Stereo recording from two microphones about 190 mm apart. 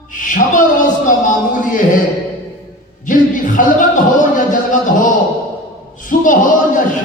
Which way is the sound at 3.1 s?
45° left (ahead or behind).